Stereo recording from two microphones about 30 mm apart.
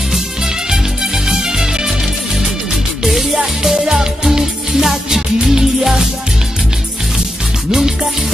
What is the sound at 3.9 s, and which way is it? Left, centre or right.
Music, centre.